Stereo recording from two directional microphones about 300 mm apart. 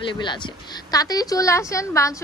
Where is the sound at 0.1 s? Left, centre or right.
Centre.